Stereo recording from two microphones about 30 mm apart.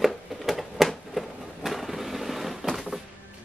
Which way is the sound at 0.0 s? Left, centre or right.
Centre.